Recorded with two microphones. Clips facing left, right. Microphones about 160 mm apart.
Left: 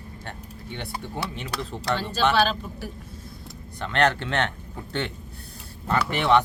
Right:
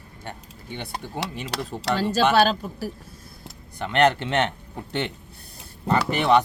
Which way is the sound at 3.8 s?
15° right (ahead or behind).